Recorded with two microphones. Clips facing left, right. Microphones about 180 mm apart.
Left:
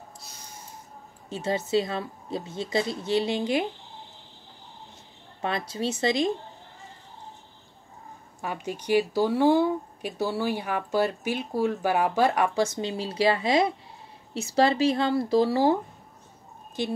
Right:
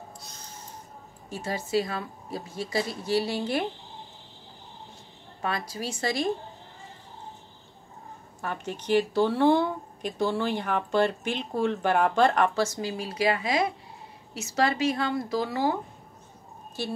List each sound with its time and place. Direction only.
1.3 s speech: 25° left (ahead or behind)
5.4 s speech: 25° left (ahead or behind)
8.4 s speech: 10° left (ahead or behind); by 15.8 s 30° left (ahead or behind)
16.8 s speech: 15° left (ahead or behind)